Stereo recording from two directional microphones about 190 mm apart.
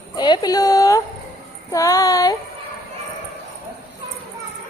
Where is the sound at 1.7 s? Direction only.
15° left (ahead or behind).